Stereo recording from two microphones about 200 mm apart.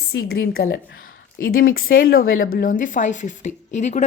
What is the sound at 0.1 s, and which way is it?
A woman's voice, 50° left (ahead or behind).